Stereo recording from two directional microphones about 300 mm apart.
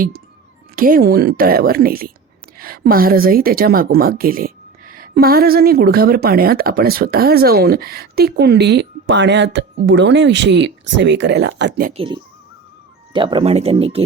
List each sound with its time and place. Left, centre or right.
0.8 s a woman's voice: right